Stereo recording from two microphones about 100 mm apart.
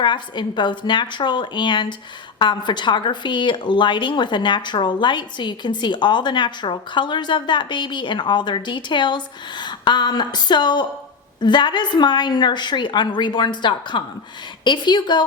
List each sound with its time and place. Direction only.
0.0 s a woman's voice: 50° left (ahead or behind)